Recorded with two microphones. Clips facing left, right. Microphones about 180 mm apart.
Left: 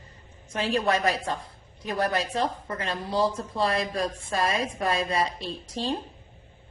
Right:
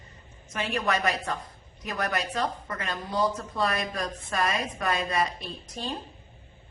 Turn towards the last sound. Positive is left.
turn(degrees=25)  # may be behind; listen again after turning